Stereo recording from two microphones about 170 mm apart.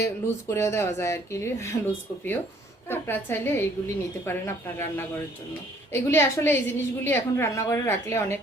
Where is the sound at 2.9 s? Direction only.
10° left (ahead or behind).